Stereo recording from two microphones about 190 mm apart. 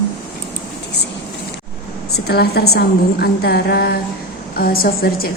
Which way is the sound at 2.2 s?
55° left (ahead or behind).